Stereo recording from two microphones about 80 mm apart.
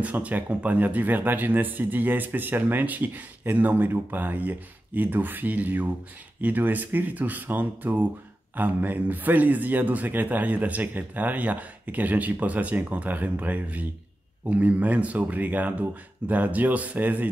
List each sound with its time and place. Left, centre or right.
0.0 s speech: centre